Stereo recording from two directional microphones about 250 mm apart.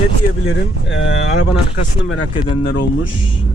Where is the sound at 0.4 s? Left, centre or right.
Left.